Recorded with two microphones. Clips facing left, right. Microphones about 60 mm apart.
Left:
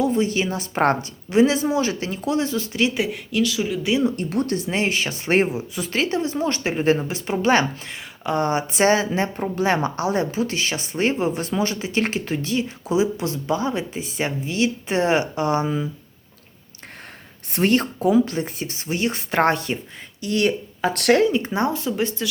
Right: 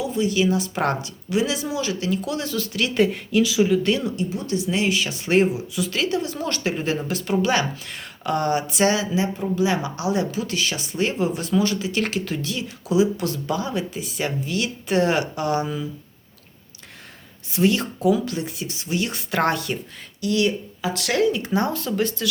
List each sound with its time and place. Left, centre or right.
0.0 s speech: left
2.9 s speech: centre
4.1 s speech: left
7.4 s speech: left
7.9 s speech: left
17.5 s speech: left
21.2 s speech: left